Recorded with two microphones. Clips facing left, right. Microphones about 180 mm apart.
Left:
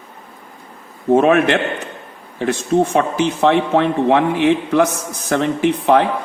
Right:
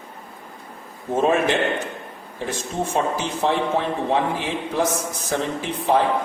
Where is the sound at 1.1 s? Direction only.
70° left (ahead or behind).